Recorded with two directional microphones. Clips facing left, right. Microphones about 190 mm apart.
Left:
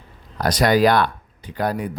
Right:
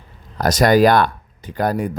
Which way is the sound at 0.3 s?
45° right (ahead or behind).